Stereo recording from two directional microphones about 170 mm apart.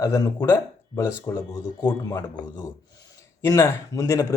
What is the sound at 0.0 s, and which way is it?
Speech, 20° left (ahead or behind).